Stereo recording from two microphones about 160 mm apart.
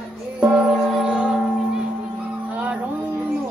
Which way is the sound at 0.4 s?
5° right (ahead or behind).